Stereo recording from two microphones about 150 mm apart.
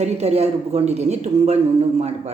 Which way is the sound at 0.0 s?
45° right (ahead or behind).